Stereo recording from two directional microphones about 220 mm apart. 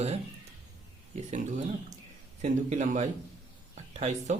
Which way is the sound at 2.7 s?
30° right (ahead or behind).